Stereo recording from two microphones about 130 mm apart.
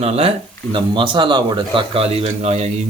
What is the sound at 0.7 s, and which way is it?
Speech, 40° right (ahead or behind).